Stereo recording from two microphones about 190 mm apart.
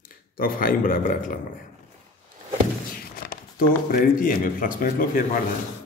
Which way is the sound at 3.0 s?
50° left (ahead or behind).